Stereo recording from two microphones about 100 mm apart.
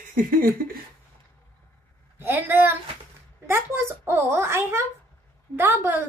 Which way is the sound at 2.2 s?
20° right (ahead or behind).